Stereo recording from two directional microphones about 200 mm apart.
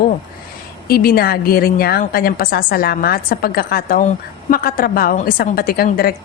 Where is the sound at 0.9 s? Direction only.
50° left (ahead or behind).